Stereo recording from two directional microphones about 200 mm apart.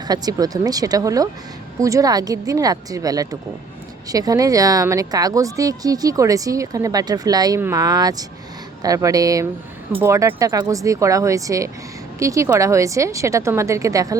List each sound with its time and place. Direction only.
0.1 s a woman's voice: 20° right (ahead or behind)